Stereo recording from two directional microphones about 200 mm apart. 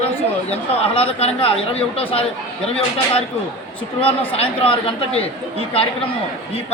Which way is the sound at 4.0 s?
30° left (ahead or behind).